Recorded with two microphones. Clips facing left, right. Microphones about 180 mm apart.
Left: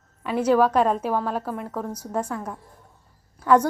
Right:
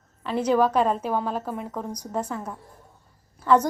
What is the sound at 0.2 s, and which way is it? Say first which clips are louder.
A woman's voice: left 2 dB; 10° left (ahead or behind).